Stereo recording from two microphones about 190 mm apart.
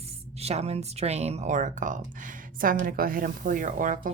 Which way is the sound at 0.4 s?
35° right (ahead or behind).